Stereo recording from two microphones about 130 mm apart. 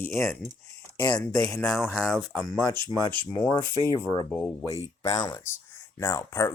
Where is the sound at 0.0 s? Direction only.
20° left (ahead or behind).